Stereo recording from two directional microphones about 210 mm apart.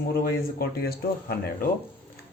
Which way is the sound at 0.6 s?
45° left (ahead or behind).